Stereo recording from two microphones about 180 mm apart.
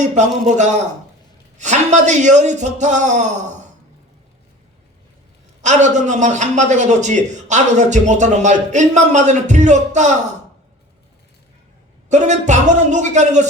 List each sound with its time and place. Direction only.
0.0 s a man's voice: 40° right (ahead or behind)
5.6 s a man's voice: 40° right (ahead or behind)
12.0 s a man's voice: 40° right (ahead or behind)